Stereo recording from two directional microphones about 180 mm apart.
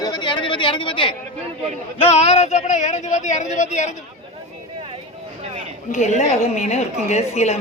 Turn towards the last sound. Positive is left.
turn(degrees=35)  # may be behind; listen again after turning